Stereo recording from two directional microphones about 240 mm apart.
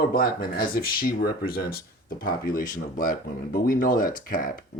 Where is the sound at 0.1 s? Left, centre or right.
Left.